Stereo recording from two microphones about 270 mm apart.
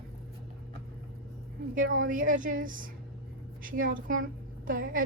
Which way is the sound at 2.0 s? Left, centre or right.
Right.